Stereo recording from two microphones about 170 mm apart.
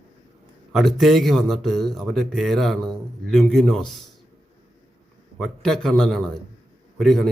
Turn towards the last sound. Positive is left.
turn(degrees=0)  # may be behind; listen again after turning